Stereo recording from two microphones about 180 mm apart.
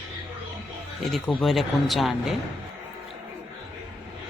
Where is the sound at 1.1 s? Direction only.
5° left (ahead or behind).